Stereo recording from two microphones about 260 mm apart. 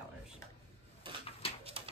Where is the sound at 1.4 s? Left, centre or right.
Left.